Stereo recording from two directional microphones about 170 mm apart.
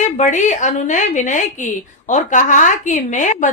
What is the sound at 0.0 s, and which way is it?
A woman's voice, 45° left (ahead or behind).